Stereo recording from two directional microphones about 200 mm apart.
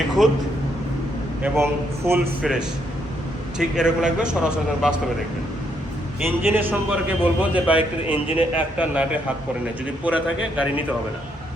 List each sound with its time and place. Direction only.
0.2 s speech: centre (ahead or behind)
1.4 s a man's voice: 10° right (ahead or behind)
6.2 s a man's voice: 10° right (ahead or behind)
8.0 s a man's voice: 25° left (ahead or behind)
8.5 s a man's voice: 5° right (ahead or behind)